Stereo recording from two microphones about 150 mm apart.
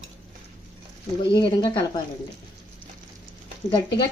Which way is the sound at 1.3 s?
30° left (ahead or behind).